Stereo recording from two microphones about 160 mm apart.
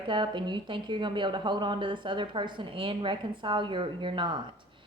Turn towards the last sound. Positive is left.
turn(degrees=-30)  # may be behind; listen again after turning